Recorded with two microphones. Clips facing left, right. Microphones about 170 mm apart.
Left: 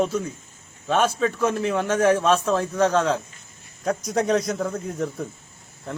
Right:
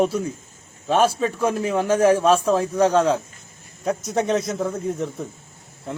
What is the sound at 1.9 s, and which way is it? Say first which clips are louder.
Speech: right 2 dB; 30° right (ahead or behind).